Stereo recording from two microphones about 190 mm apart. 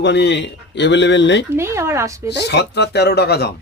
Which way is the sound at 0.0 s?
70° left (ahead or behind).